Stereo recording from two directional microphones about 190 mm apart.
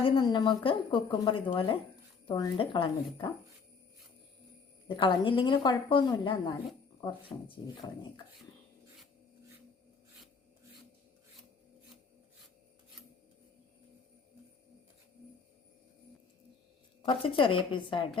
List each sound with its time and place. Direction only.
0.0 s a woman's voice: 25° left (ahead or behind)
4.9 s a woman's voice: 25° left (ahead or behind)
17.1 s a woman's voice: 30° left (ahead or behind)